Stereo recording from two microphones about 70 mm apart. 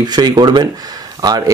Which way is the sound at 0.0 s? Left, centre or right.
Right.